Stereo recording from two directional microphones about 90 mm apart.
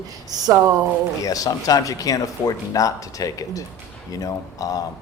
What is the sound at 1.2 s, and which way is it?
A man's voice, 40° left (ahead or behind).